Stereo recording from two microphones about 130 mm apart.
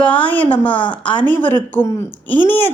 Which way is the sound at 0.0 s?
10° left (ahead or behind).